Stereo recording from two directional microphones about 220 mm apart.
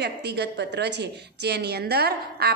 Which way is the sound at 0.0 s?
50° right (ahead or behind).